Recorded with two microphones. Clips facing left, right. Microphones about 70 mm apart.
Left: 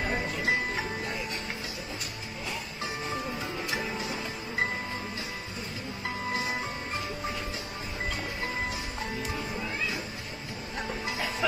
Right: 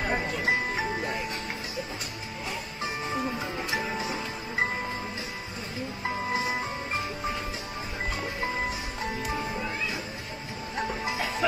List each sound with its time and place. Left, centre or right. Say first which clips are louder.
0.0 s music: right 2 dB; right
2.8 s music: right 4 dB; centre
6.0 s music: right 3 dB; right
9.0 s music: right 5 dB; right